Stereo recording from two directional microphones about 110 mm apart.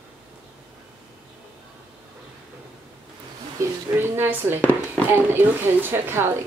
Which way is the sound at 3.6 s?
30° right (ahead or behind).